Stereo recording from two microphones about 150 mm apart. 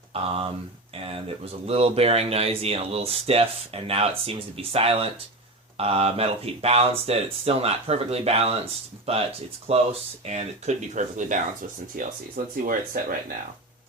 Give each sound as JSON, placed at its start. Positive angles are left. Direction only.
{"t": 0.1, "sound": "speech", "side_deg": -40}
{"t": 11.9, "sound": "speech", "side_deg": -70}